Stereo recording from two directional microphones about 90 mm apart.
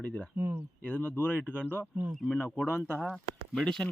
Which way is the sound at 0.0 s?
15° left (ahead or behind).